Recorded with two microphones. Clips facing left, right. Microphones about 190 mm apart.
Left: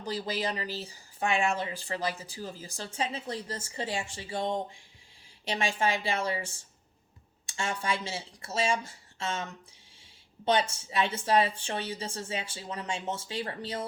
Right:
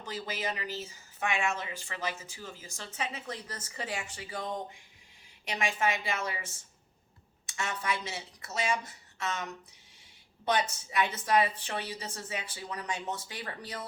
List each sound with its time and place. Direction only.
0.0 s speech: 35° left (ahead or behind)